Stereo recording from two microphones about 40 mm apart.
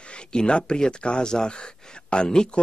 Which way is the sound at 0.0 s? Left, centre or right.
Left.